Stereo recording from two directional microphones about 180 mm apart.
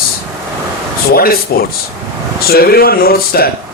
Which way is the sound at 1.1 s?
55° left (ahead or behind).